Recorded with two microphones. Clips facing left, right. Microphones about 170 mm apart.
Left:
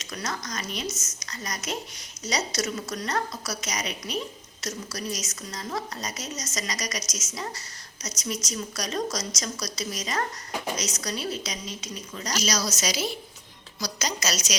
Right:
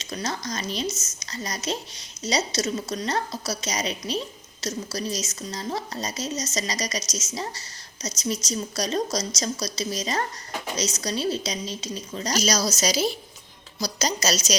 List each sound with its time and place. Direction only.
0.0 s a woman's voice: 25° right (ahead or behind)